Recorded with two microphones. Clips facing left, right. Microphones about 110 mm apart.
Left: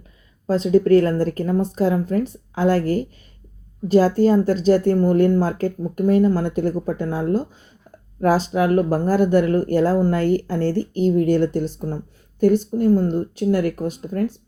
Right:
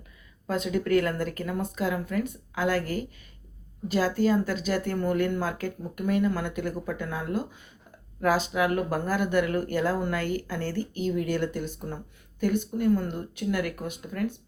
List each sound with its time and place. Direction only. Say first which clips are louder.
0.4 s a woman's voice: left 11 dB; 35° left (ahead or behind)
12.7 s a woman's voice: left 8 dB; 35° left (ahead or behind)